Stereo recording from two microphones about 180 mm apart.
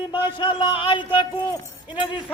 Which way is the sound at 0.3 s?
25° left (ahead or behind).